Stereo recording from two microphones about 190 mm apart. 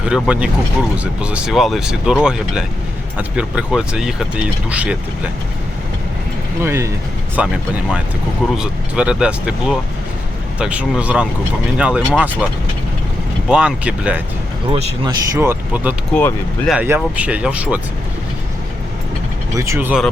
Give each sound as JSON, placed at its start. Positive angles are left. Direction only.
{"t": 0.0, "sound": "speech", "side_deg": -5}
{"t": 6.6, "sound": "speech", "side_deg": -15}
{"t": 13.5, "sound": "speech", "side_deg": -5}
{"t": 14.7, "sound": "a man's voice", "side_deg": -35}
{"t": 15.0, "sound": "speech", "side_deg": -15}
{"t": 16.1, "sound": "speech", "side_deg": 10}
{"t": 16.7, "sound": "speech", "side_deg": -10}
{"t": 19.5, "sound": "speech", "side_deg": -15}